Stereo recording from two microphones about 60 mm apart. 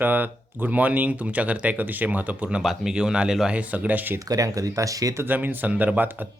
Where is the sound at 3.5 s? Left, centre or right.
Right.